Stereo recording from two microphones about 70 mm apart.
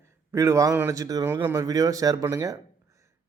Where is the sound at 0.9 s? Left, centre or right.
Right.